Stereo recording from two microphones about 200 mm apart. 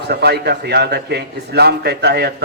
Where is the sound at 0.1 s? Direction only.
55° right (ahead or behind).